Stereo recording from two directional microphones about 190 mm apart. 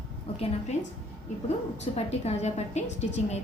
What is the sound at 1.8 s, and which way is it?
A woman's voice, 35° left (ahead or behind).